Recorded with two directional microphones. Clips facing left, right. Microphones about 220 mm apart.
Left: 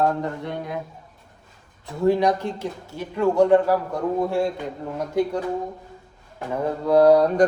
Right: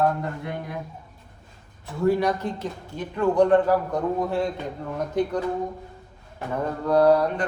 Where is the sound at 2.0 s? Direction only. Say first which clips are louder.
Left 2 dB; 15° left (ahead or behind).